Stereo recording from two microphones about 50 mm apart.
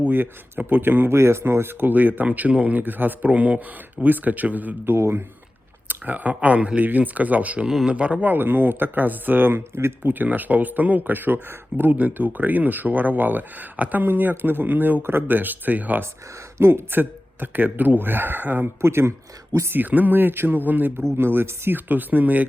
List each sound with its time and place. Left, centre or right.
0.0 s speech: right
1.1 s speech: right
4.9 s speech: right
5.9 s speech: right
10.1 s speech: right
16.6 s speech: right
16.9 s speech: right
18.8 s speech: right
19.7 s speech: right
21.2 s speech: right
21.8 s speech: right